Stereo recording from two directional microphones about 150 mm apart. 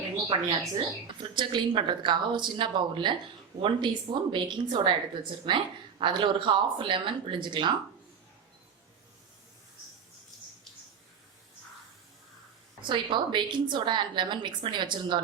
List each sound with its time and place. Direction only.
0.8 s a woman's voice: 30° right (ahead or behind)
12.8 s a woman's voice: 30° right (ahead or behind)